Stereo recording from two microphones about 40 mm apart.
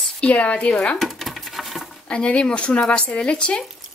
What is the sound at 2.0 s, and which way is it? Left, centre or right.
Speech, left.